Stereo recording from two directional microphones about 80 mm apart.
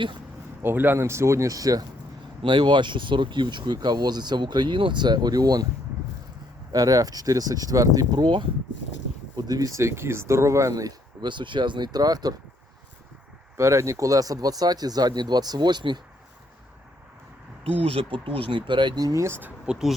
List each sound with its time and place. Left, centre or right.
0.6 s speech: right
2.4 s speech: right
6.7 s speech: right
8.1 s speech: right
9.3 s speech: right
11.2 s speech: right
13.6 s speech: right
18.1 s speech: right
19.1 s speech: right
19.6 s speech: centre